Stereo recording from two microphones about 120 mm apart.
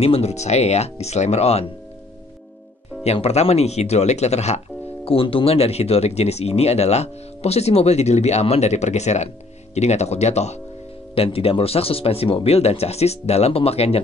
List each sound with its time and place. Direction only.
0.0 s speech: 60° left (ahead or behind)
3.0 s speech: 60° left (ahead or behind)
5.0 s speech: 50° left (ahead or behind); by 10.6 s 65° left (ahead or behind)
11.1 s speech: 50° left (ahead or behind)